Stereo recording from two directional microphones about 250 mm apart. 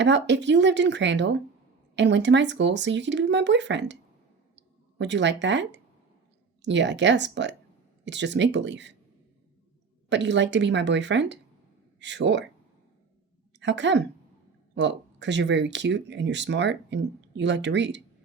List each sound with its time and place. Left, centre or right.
0.0 s speech: right
4.5 s a sound: right
6.6 s speech: right
10.1 s speech: right
13.6 s a woman's voice: right